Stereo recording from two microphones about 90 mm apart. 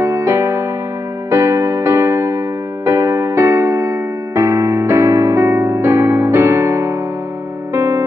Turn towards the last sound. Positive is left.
turn(degrees=-30)  # may be behind; listen again after turning